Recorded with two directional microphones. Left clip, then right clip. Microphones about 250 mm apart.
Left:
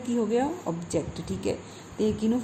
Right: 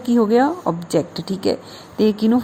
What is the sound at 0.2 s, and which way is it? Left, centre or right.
Speech, right.